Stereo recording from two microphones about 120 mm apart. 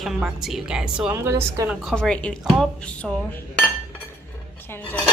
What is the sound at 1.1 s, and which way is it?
Speech, 25° right (ahead or behind).